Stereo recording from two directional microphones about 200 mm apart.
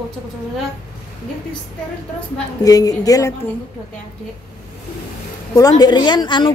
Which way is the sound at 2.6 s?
20° left (ahead or behind).